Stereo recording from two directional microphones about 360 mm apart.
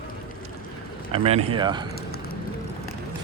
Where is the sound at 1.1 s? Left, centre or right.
Centre.